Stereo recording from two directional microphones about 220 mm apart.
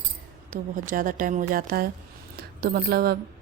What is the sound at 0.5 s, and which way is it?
A woman's voice, 40° right (ahead or behind).